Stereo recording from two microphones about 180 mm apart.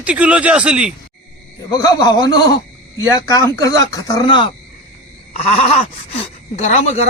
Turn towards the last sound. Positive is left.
turn(degrees=40)  # may be behind; listen again after turning